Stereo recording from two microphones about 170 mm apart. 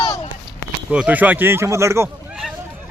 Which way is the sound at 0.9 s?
10° right (ahead or behind).